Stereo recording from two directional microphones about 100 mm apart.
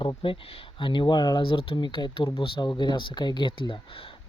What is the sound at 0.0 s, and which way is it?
Speech, 60° left (ahead or behind).